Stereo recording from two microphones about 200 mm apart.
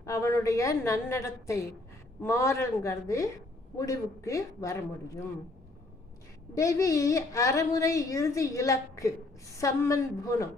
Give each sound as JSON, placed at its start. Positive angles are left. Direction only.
{"t": 0.0, "sound": "a woman's voice", "side_deg": 15}
{"t": 6.5, "sound": "a woman's voice", "side_deg": 15}